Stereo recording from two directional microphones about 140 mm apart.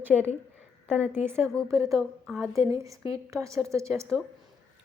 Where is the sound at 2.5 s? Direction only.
20° right (ahead or behind).